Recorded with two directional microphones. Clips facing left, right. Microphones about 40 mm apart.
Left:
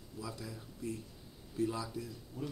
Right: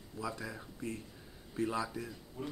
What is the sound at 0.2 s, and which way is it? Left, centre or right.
A man's voice, right.